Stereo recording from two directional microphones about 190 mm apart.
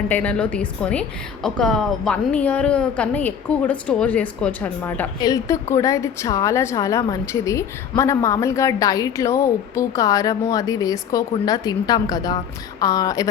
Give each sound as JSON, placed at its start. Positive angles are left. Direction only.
{"t": 0.1, "sound": "a woman's voice", "side_deg": 10}